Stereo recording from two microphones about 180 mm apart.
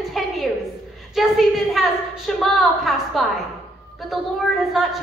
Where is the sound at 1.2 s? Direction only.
Centre (ahead or behind).